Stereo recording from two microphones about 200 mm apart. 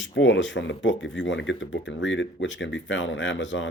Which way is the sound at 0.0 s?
65° left (ahead or behind).